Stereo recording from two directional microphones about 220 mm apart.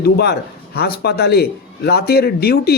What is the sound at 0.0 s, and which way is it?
Speech, 45° left (ahead or behind).